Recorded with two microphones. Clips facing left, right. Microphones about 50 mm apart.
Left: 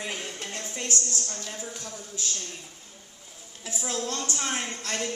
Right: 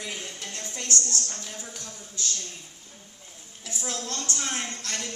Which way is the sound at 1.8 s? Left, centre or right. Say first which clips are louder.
Left 2 dB; centre.